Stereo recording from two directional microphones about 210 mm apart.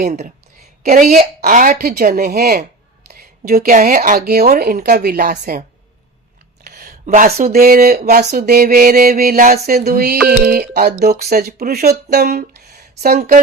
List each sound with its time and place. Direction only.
0.0 s a woman's voice: 40° right (ahead or behind)
6.7 s speech: 45° right (ahead or behind)
12.1 s a sound: 45° right (ahead or behind)
13.1 s a woman's voice: 40° right (ahead or behind)